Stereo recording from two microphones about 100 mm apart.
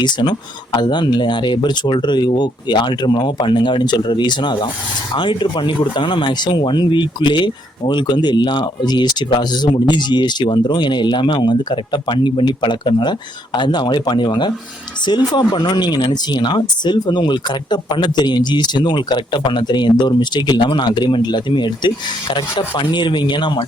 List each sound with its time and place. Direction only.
0.0 s speech: 50° left (ahead or behind)